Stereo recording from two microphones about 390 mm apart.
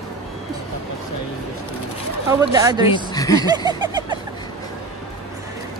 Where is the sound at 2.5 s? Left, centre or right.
Centre.